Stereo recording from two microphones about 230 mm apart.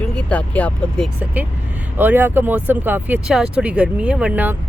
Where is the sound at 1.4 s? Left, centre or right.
Centre.